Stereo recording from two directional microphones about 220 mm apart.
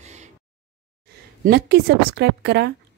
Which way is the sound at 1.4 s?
45° right (ahead or behind).